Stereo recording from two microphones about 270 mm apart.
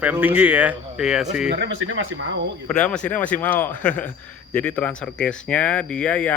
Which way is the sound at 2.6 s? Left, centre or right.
Centre.